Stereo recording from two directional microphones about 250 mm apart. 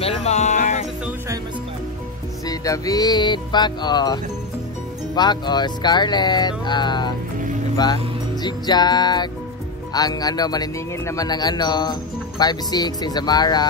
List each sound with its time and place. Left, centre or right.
0.0 s music: left
2.4 s speech: centre